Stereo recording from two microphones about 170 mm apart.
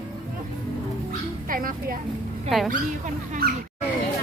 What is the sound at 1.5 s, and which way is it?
Speech, 55° right (ahead or behind).